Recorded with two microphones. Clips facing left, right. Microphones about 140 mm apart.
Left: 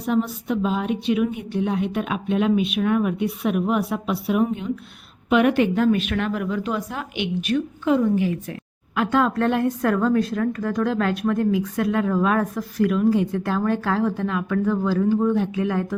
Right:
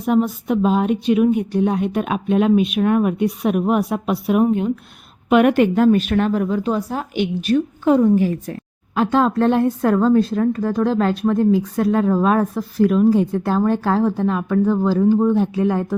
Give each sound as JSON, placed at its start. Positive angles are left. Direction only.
{"t": 0.0, "sound": "a woman's voice", "side_deg": -50}